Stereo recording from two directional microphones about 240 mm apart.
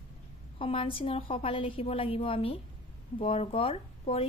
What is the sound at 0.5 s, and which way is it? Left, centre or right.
A woman's voice, left.